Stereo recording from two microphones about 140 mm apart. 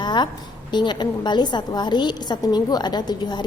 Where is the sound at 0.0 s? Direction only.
30° left (ahead or behind).